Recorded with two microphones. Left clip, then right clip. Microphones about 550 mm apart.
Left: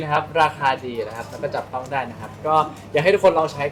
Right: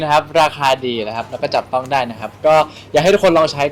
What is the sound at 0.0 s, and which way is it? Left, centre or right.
A man's voice, right.